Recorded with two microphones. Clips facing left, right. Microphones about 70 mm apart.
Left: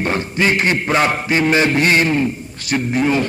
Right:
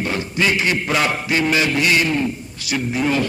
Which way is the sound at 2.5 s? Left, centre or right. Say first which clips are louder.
Left 3 dB; left.